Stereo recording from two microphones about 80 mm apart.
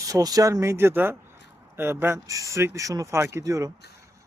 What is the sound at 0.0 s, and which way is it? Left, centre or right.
Speech, right.